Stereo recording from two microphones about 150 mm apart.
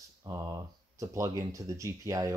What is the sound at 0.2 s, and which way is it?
Speech, 20° right (ahead or behind).